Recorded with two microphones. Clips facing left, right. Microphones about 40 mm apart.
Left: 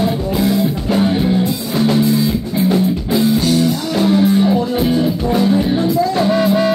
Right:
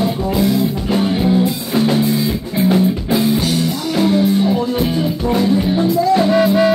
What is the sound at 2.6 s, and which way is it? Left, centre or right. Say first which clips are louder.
Music: right 2 dB; centre.